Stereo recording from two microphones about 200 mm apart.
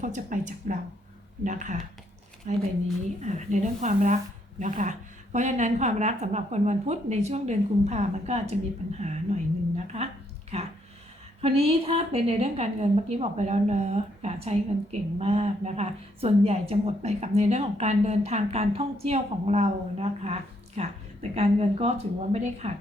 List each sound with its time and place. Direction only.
0.0 s a woman's voice: 40° right (ahead or behind)
11.3 s a woman's voice: 30° right (ahead or behind)